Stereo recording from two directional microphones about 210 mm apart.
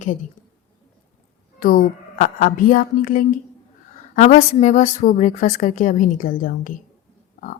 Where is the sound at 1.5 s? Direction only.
40° left (ahead or behind).